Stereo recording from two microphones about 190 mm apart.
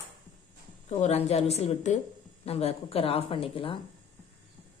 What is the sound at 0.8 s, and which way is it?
Speech, 35° left (ahead or behind).